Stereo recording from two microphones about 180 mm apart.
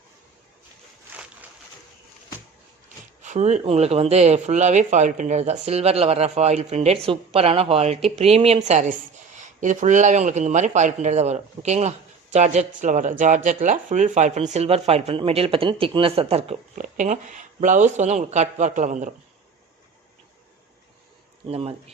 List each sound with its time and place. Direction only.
3.2 s a woman's voice: 40° right (ahead or behind)
21.4 s a woman's voice: 35° right (ahead or behind)